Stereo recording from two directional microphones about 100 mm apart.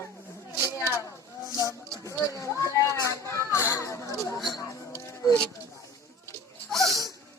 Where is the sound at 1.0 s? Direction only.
30° left (ahead or behind).